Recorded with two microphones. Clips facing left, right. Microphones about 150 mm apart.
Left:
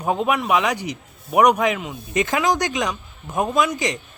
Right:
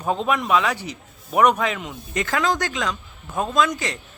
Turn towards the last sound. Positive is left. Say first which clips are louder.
# left 1 dB
turn(degrees=15)  # may be behind; listen again after turning